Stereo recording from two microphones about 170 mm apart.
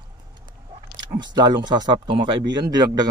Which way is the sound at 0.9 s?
25° right (ahead or behind).